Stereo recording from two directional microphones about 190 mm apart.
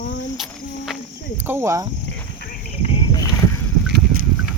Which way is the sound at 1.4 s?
15° right (ahead or behind).